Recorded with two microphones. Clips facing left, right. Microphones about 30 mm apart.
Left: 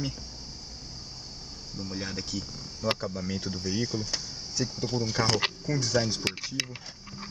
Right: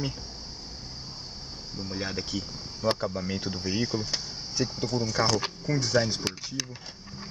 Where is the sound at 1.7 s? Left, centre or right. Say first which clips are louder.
Right 2 dB; right.